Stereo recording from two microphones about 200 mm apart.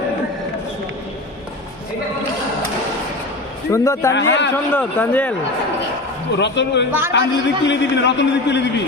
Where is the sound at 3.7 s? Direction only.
15° left (ahead or behind).